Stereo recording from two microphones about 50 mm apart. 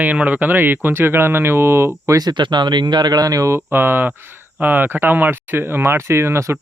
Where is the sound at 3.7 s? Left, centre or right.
Right.